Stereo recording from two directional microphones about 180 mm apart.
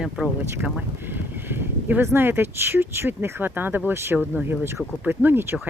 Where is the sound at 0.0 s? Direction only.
5° right (ahead or behind).